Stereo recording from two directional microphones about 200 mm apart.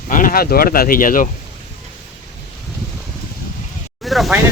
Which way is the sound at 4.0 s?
Centre (ahead or behind).